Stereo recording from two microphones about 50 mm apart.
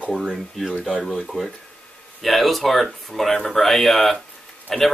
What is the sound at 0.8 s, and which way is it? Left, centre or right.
Speech, centre.